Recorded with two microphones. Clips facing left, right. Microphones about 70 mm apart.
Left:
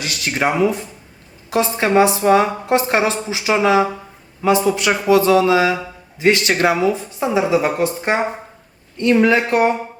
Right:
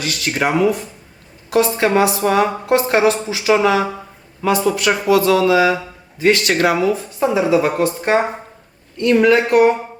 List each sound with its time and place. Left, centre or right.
0.0 s a woman's voice: left